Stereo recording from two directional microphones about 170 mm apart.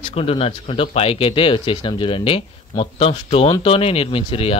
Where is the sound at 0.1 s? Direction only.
35° left (ahead or behind).